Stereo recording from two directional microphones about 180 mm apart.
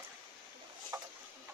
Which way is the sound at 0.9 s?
15° right (ahead or behind).